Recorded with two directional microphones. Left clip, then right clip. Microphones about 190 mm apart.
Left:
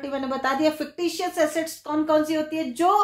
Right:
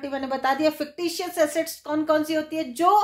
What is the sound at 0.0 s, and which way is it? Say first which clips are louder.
A woman's voice: right 1 dB; 35° right (ahead or behind).